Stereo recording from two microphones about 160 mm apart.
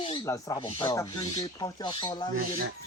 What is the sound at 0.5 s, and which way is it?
Music, 35° left (ahead or behind).